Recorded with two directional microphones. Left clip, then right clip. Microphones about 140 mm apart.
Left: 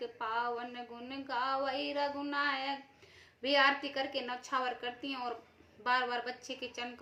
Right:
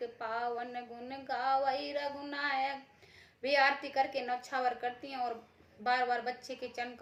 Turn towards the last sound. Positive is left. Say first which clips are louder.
# right 1 dB
turn(degrees=25)  # may be behind; listen again after turning